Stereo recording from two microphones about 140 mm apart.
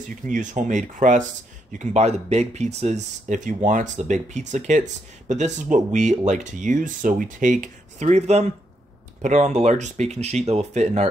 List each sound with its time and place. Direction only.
0.0 s speech: 70° right (ahead or behind)